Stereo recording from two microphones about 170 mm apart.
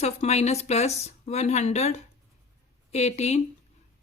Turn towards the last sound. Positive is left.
turn(degrees=40)  # may be behind; listen again after turning